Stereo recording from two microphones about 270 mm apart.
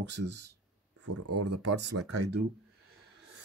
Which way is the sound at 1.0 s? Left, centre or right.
Right.